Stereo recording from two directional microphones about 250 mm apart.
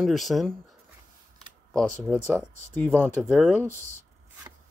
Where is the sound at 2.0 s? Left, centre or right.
Centre.